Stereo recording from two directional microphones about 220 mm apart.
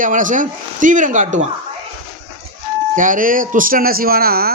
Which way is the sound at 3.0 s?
35° right (ahead or behind).